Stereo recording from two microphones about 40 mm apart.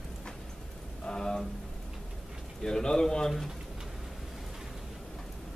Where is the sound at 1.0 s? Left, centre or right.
Centre.